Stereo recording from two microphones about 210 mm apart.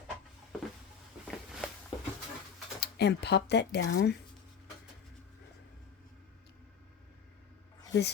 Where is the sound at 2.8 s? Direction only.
50° left (ahead or behind).